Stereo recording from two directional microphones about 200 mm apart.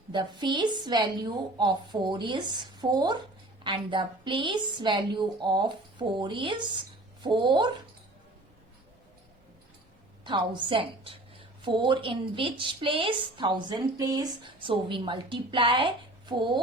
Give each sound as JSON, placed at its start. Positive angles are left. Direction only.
{"t": 0.1, "sound": "a woman's voice", "side_deg": -20}
{"t": 10.2, "sound": "a woman's voice", "side_deg": -25}